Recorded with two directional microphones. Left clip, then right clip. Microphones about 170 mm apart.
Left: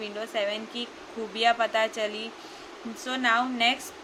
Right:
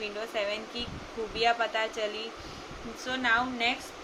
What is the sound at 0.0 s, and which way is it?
A woman's voice, 20° left (ahead or behind).